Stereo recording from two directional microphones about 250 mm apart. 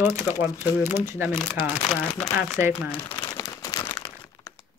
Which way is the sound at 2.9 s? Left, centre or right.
Centre.